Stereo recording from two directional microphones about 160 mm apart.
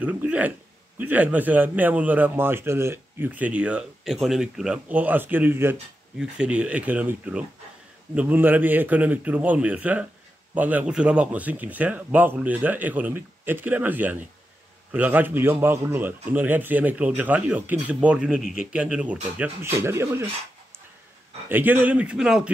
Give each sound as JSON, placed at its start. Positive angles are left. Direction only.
{"t": 0.0, "sound": "a man's voice", "side_deg": -10}
{"t": 21.5, "sound": "a man's voice", "side_deg": -10}